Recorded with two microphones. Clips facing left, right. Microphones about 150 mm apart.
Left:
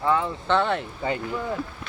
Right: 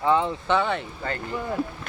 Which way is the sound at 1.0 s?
10° left (ahead or behind).